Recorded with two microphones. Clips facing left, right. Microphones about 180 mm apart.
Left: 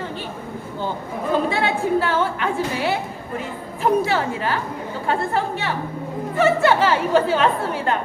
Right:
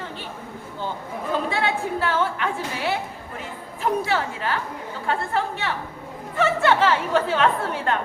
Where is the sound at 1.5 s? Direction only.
5° left (ahead or behind).